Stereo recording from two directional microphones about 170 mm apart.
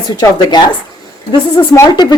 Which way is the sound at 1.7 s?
25° left (ahead or behind).